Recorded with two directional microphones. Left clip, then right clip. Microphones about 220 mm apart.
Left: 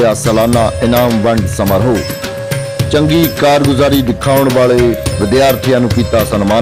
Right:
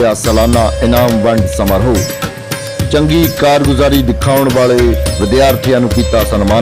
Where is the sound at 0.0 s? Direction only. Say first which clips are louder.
Even; centre (ahead or behind).